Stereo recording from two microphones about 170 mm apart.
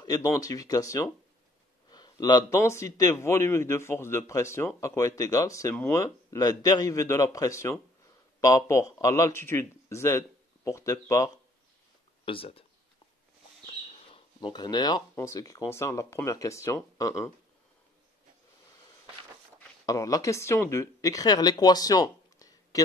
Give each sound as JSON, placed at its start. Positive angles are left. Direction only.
{"t": 0.0, "sound": "a man's voice", "side_deg": 20}
{"t": 12.3, "sound": "speech", "side_deg": 35}
{"t": 13.7, "sound": "speech", "side_deg": 30}
{"t": 19.9, "sound": "speech", "side_deg": 20}